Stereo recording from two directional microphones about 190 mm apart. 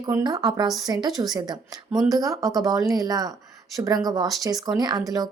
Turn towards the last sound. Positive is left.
turn(degrees=-20)  # may be behind; listen again after turning